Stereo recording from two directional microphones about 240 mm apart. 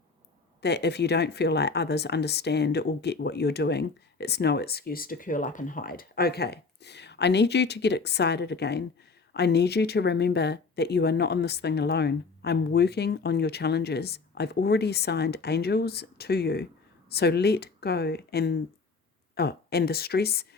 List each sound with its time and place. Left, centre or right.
0.6 s speech: left